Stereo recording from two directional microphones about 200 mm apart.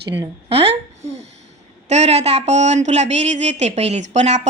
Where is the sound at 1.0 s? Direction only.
35° right (ahead or behind).